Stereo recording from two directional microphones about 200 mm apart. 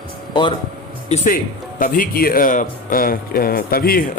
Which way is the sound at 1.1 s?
40° left (ahead or behind).